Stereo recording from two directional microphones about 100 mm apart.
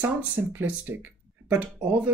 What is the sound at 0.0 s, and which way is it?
Speech, 20° right (ahead or behind).